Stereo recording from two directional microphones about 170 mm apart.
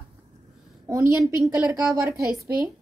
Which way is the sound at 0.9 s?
15° right (ahead or behind).